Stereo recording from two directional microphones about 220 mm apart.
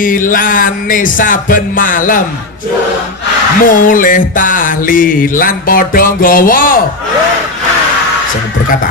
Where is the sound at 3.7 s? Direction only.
40° left (ahead or behind).